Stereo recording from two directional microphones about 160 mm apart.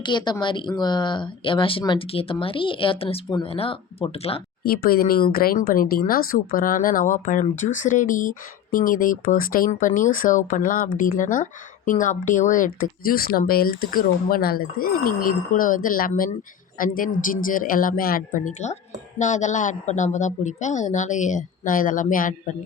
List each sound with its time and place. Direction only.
0.0 s speech: 30° left (ahead or behind)
4.6 s a woman's voice: 70° left (ahead or behind)